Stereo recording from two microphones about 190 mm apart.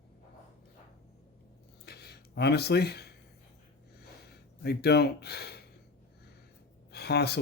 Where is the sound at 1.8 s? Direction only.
60° left (ahead or behind).